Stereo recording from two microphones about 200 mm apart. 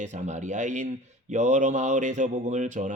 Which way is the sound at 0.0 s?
35° right (ahead or behind).